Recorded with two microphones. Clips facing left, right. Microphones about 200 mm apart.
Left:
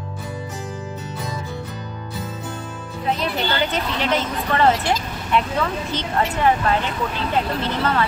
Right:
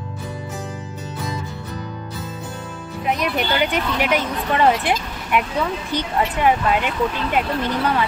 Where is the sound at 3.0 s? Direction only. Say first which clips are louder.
Right 1 dB; 15° right (ahead or behind).